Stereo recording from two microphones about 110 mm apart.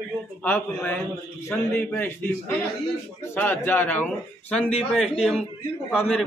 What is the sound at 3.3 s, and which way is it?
Speech, 15° left (ahead or behind).